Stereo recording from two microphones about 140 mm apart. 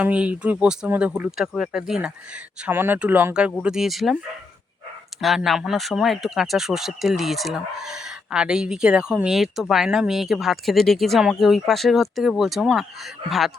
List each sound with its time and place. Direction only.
0.0 s speech: 10° right (ahead or behind)
5.2 s speech: centre (ahead or behind)